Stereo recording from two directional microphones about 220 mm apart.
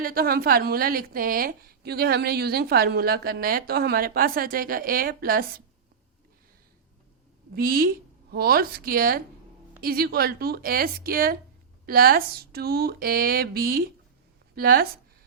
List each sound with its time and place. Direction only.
0.0 s a woman's voice: 40° right (ahead or behind)
7.5 s a woman's voice: 40° right (ahead or behind)